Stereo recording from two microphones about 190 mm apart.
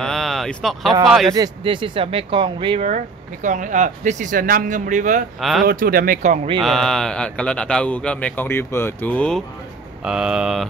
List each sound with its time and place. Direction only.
0.0 s a sound: centre (ahead or behind)
1.0 s speech: centre (ahead or behind)
1.3 s speech: 25° right (ahead or behind)
3.4 s speech: 40° right (ahead or behind)
5.4 s speech: centre (ahead or behind)
5.7 s speech: 50° right (ahead or behind)
6.6 s speech: centre (ahead or behind)
10.0 s speech: 5° right (ahead or behind)